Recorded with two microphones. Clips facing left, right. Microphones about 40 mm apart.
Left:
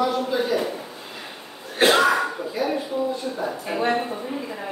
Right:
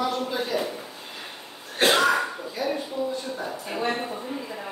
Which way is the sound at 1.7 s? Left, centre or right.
Centre.